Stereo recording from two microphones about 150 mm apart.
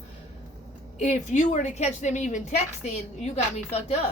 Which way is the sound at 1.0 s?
55° left (ahead or behind).